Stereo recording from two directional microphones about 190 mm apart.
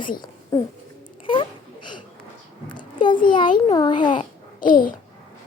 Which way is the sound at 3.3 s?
25° left (ahead or behind).